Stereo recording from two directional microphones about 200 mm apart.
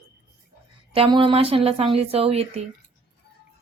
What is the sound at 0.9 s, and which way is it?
Speech, 25° right (ahead or behind).